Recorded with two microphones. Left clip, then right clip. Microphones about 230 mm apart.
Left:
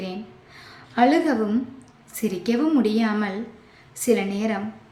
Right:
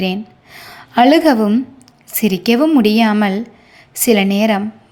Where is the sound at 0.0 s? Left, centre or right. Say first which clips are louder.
Right 12 dB; right.